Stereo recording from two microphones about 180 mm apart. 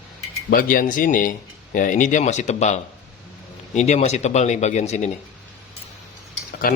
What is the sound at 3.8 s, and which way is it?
Speech, 40° left (ahead or behind).